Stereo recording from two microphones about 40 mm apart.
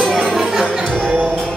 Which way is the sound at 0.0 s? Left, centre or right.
Centre.